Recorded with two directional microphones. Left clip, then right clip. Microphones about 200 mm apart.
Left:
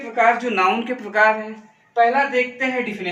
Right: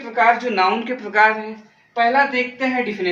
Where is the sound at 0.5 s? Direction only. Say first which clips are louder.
Right 1 dB; 5° left (ahead or behind).